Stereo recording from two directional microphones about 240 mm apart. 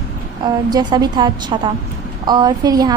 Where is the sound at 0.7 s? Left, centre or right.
Centre.